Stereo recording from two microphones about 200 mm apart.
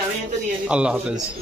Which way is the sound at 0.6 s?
5° right (ahead or behind).